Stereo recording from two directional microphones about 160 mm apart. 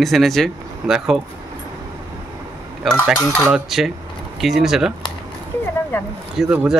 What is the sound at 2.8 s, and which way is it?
Speech, 5° left (ahead or behind).